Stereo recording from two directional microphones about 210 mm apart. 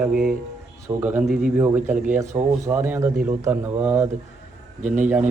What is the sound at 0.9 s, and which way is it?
Speech, 10° right (ahead or behind).